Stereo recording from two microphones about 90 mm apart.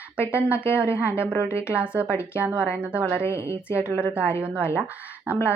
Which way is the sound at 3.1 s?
30° left (ahead or behind).